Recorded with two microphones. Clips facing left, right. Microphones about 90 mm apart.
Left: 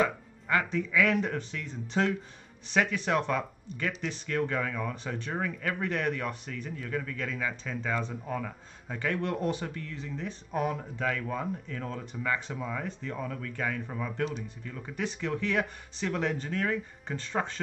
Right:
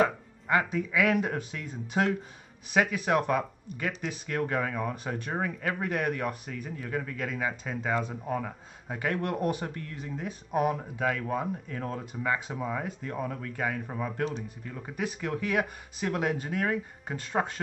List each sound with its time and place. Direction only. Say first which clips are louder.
0.5 s a man's voice: right 2 dB; 15° right (ahead or behind)
7.4 s speech: right 2 dB; 25° right (ahead or behind)
7.8 s a man's voice: right 3 dB; 10° right (ahead or behind)